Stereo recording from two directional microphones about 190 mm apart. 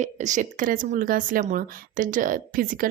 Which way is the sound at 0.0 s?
40° right (ahead or behind).